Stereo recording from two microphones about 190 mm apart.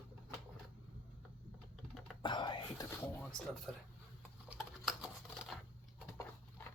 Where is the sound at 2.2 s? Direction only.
25° left (ahead or behind).